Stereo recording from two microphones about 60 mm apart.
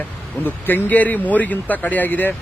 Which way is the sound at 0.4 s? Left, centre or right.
Left.